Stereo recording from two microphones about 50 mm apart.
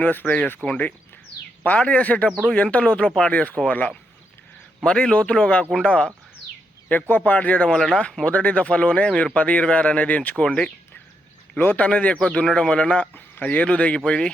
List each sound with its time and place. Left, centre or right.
0.0 s speech: left
1.6 s speech: left
4.8 s speech: centre
6.8 s speech: left
7.7 s speech: centre
8.2 s speech: left
10.3 s speech: centre
11.5 s speech: left
12.1 s speech: centre